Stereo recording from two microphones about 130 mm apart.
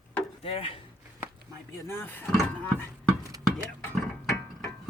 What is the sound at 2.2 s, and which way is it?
Speech, centre (ahead or behind).